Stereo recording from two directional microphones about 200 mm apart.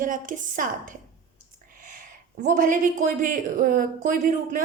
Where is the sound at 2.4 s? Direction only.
40° right (ahead or behind).